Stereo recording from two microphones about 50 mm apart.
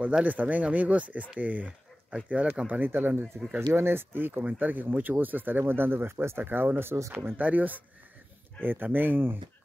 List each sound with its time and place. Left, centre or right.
0.2 s speech: right
7.3 s speech: right